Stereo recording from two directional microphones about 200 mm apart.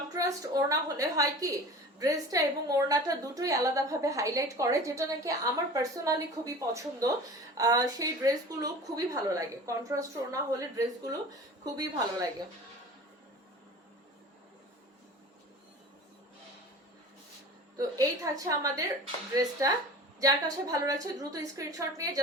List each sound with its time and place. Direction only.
0.1 s a woman's voice: 20° right (ahead or behind)
17.7 s a woman's voice: 15° right (ahead or behind)